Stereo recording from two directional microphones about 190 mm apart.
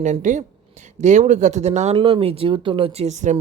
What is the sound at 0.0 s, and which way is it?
Speech, 40° right (ahead or behind).